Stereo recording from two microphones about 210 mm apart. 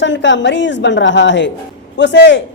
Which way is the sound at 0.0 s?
60° left (ahead or behind).